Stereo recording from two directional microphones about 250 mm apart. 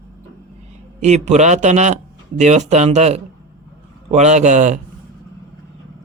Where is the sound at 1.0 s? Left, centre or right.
Right.